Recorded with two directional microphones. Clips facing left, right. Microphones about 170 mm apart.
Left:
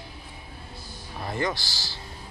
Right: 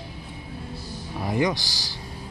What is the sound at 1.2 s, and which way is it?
Speech, 15° right (ahead or behind).